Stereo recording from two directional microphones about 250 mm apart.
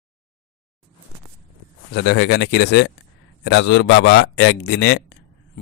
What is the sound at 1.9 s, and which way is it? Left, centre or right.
A man's voice, left.